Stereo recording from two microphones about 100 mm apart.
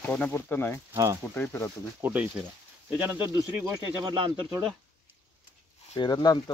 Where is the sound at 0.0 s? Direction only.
20° left (ahead or behind).